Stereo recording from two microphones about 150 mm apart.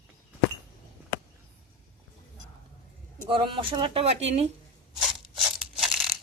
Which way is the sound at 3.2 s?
35° right (ahead or behind).